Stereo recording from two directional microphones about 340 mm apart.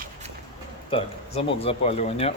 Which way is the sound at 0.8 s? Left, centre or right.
Centre.